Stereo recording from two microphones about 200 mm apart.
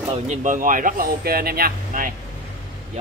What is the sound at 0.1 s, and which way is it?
Speech, 35° right (ahead or behind).